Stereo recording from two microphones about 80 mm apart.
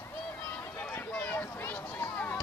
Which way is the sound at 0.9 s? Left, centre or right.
Left.